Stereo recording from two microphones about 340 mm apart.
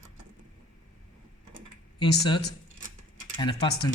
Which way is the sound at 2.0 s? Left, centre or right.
Centre.